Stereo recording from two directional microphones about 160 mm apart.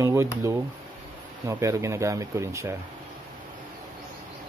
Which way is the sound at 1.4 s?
20° right (ahead or behind).